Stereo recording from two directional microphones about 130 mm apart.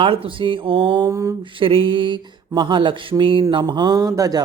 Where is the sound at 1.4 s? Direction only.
40° right (ahead or behind).